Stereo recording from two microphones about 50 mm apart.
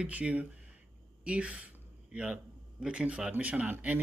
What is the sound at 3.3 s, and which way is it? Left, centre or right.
Speech, right.